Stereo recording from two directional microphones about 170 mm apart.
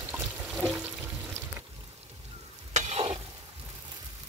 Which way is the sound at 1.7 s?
35° right (ahead or behind).